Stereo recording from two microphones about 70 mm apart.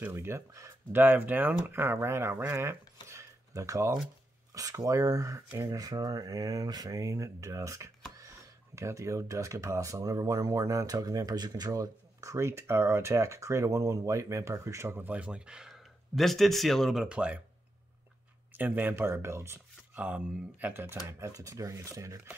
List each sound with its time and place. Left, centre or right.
0.1 s speech: right
0.9 s speech: right
15.0 s speech: right
15.7 s speech: centre
17.0 s speech: centre
18.5 s speech: right
19.9 s speech: right
21.3 s speech: right